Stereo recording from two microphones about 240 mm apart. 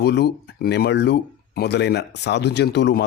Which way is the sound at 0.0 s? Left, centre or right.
Left.